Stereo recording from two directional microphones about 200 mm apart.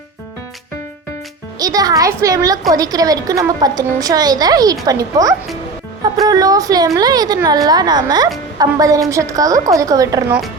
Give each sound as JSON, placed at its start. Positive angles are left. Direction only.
{"t": 1.5, "sound": "a woman's voice", "side_deg": -20}